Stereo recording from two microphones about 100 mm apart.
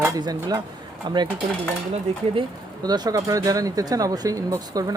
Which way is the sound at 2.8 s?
40° right (ahead or behind).